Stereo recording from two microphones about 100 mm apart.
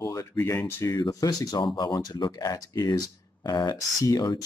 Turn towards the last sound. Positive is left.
turn(degrees=35)  # may be behind; listen again after turning